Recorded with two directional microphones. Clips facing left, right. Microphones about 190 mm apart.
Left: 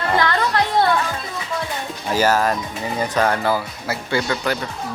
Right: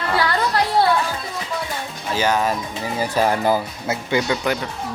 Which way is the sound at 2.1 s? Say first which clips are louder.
Left 2 dB; 5° left (ahead or behind).